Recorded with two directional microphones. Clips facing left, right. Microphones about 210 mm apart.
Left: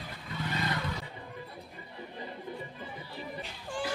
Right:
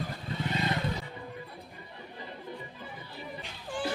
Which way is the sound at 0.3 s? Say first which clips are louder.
Right 2 dB; 25° right (ahead or behind).